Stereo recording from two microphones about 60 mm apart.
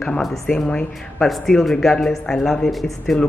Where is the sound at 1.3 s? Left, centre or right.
Centre.